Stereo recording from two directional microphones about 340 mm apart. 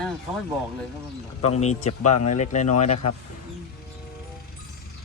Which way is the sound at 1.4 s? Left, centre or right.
Centre.